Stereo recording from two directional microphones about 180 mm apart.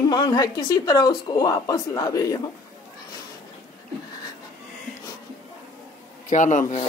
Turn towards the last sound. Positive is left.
turn(degrees=45)  # may be behind; listen again after turning